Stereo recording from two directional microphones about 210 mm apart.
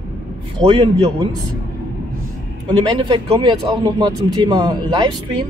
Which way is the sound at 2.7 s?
20° right (ahead or behind).